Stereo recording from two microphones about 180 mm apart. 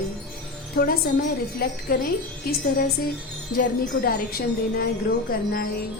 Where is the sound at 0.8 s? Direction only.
55° left (ahead or behind).